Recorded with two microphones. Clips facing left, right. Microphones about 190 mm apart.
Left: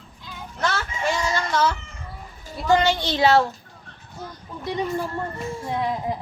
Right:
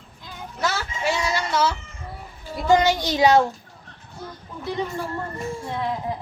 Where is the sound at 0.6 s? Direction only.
10° right (ahead or behind).